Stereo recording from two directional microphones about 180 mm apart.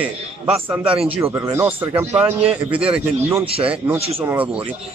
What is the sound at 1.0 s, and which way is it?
Speech, 10° right (ahead or behind).